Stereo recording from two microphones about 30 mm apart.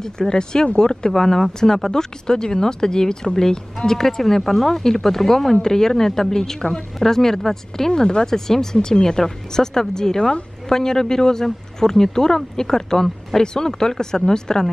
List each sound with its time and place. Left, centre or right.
0.3 s speech: left
1.1 s speech: centre
7.9 s speech: left
8.3 s speech: centre